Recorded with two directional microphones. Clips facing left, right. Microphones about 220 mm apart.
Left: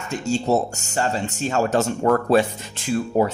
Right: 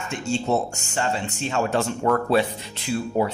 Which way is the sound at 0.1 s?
40° left (ahead or behind).